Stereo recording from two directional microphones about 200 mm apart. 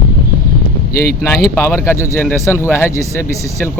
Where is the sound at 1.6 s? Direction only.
10° left (ahead or behind).